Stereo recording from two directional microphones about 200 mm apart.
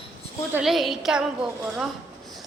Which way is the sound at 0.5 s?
Centre (ahead or behind).